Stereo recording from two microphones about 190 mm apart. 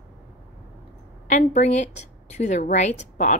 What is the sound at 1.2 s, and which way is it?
Speech, 40° left (ahead or behind).